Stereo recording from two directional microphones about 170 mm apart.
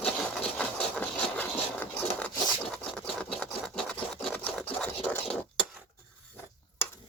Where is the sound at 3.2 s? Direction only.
5° left (ahead or behind).